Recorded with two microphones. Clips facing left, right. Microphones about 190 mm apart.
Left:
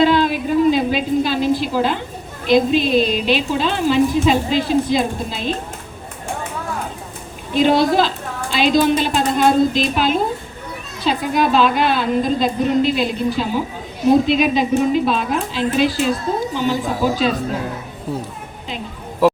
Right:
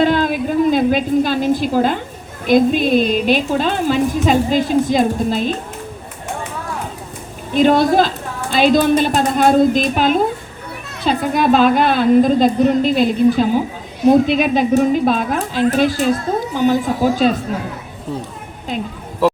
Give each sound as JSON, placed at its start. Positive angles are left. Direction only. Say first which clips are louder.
{"t": 0.0, "sound": "a sound", "louder": "even", "side_deg": -50}
{"t": 2.5, "sound": "a woman's voice", "louder": "right 2 dB", "side_deg": -50}
{"t": 7.5, "sound": "a woman's voice", "louder": "right 2 dB", "side_deg": -50}